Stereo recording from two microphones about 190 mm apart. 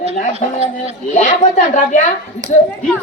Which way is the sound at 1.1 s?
40° left (ahead or behind).